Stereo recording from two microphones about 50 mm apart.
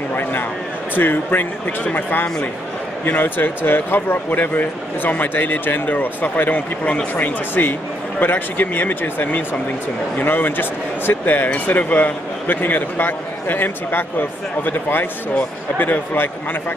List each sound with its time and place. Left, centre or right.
0.9 s speech: left